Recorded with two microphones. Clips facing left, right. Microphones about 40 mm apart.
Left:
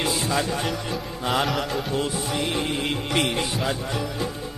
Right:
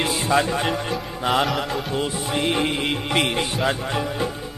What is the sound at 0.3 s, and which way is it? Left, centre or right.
Music, right.